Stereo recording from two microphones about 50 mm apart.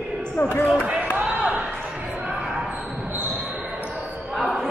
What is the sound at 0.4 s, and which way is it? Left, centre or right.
Speech, left.